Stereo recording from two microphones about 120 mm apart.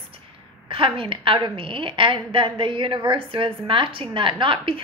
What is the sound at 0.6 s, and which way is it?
A woman's voice, 50° right (ahead or behind).